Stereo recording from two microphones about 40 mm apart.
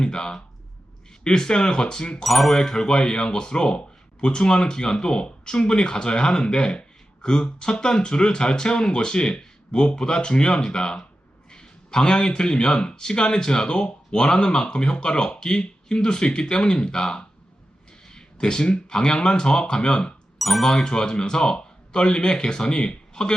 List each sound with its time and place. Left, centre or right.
0.0 s speech: centre
2.2 s speech: centre; by 20.1 s left
20.4 s speech: centre; by 23.3 s left